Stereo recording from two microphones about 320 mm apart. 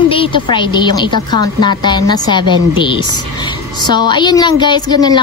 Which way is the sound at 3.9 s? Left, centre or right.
Centre.